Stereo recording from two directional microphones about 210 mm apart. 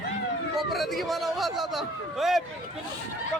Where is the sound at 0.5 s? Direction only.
Centre (ahead or behind).